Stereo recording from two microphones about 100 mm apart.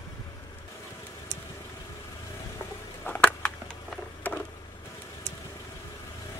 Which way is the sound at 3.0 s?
15° left (ahead or behind).